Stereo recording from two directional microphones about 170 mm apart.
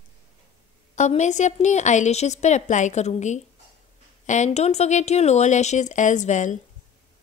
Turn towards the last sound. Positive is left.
turn(degrees=45)  # may be behind; listen again after turning